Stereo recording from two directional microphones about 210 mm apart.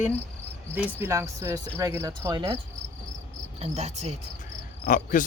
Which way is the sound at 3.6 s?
30° right (ahead or behind).